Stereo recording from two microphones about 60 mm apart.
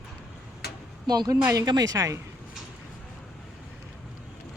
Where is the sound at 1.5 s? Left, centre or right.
Right.